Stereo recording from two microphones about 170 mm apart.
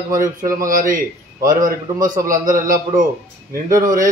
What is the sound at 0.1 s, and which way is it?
Speech, 20° right (ahead or behind).